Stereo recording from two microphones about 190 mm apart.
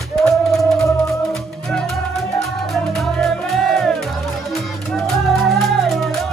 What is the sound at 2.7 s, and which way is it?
Music, centre (ahead or behind).